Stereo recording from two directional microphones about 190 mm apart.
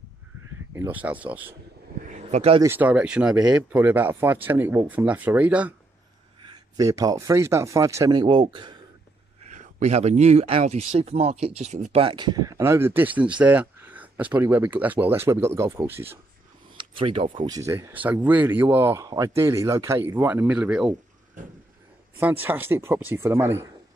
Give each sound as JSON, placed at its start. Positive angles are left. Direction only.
{"t": 0.7, "sound": "speech", "side_deg": -10}
{"t": 2.0, "sound": "a sound", "side_deg": -35}
{"t": 2.6, "sound": "speech", "side_deg": -10}
{"t": 6.8, "sound": "speech", "side_deg": -20}
{"t": 9.5, "sound": "speech", "side_deg": -40}
{"t": 17.0, "sound": "speech", "side_deg": -30}
{"t": 22.2, "sound": "speech", "side_deg": -10}